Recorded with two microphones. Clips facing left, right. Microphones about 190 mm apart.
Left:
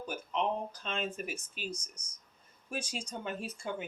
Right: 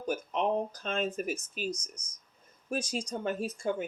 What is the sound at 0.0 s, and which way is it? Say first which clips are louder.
Speech: right 4 dB; 45° right (ahead or behind).